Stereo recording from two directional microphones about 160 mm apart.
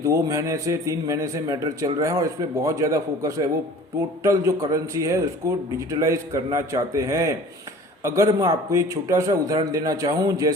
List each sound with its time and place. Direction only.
0.0 s a man's voice: 20° right (ahead or behind)